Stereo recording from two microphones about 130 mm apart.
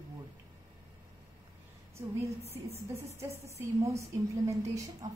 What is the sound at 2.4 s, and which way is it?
Speech, 50° right (ahead or behind).